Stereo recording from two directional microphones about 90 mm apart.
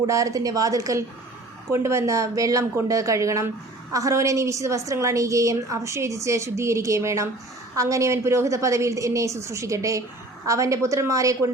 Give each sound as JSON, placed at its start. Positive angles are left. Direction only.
{"t": 0.0, "sound": "a woman's voice", "side_deg": -40}